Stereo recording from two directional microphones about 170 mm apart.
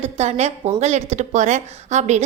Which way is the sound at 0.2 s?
40° right (ahead or behind).